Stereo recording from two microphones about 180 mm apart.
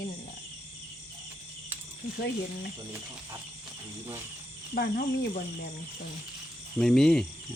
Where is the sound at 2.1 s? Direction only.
65° left (ahead or behind).